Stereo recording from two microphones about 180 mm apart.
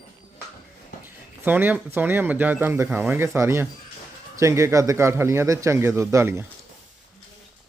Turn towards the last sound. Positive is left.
turn(degrees=-15)  # may be behind; listen again after turning